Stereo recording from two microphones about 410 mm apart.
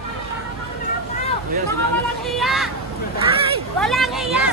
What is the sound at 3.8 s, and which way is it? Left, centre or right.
Speech, centre.